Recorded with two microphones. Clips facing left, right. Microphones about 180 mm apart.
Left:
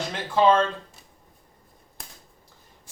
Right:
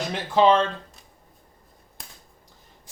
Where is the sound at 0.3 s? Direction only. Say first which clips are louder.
Right 1 dB; 20° right (ahead or behind).